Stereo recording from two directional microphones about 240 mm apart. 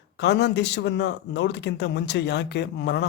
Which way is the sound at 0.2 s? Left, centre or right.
Left.